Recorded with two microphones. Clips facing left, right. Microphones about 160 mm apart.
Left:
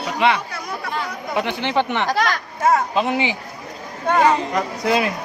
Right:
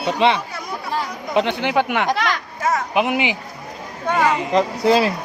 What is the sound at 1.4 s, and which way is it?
Speech, 15° right (ahead or behind).